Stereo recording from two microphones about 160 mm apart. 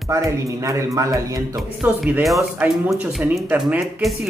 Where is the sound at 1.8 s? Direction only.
10° right (ahead or behind).